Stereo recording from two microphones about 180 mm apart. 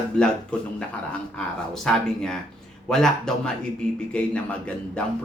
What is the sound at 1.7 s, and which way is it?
Speech, centre (ahead or behind).